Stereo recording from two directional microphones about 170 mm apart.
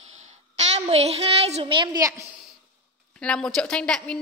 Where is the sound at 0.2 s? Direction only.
40° right (ahead or behind); by 2.2 s 20° right (ahead or behind).